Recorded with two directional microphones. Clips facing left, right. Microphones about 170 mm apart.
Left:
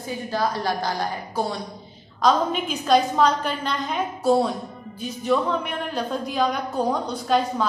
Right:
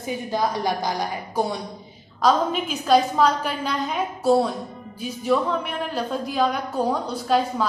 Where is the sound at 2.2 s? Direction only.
Centre (ahead or behind).